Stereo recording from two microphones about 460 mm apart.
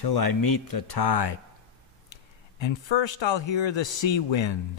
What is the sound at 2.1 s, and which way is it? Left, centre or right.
A man's voice, left.